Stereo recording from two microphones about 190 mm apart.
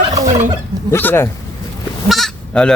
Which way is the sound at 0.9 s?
10° left (ahead or behind).